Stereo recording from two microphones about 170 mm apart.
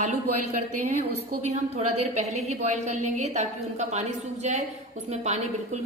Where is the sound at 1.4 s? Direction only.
40° right (ahead or behind).